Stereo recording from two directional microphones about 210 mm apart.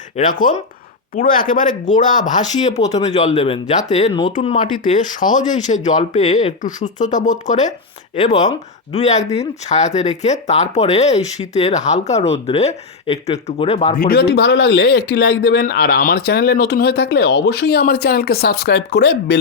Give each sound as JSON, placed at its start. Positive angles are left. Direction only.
{"t": 0.2, "sound": "speech", "side_deg": 40}
{"t": 8.1, "sound": "speech", "side_deg": 20}
{"t": 8.9, "sound": "speech", "side_deg": 30}